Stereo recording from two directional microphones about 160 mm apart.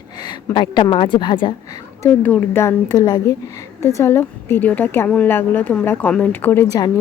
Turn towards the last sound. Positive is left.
turn(degrees=20)  # may be behind; listen again after turning